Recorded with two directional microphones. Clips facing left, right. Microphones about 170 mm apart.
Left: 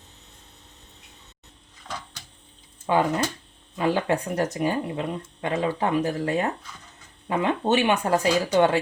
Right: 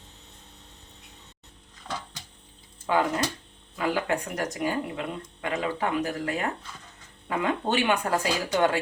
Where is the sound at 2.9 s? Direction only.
25° left (ahead or behind).